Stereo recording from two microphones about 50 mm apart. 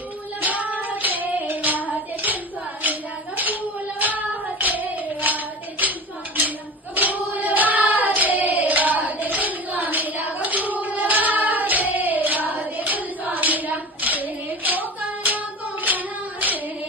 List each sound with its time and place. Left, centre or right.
0.4 s child singing: right
2.8 s a sound: right
4.0 s child singing: right
7.0 s hands: right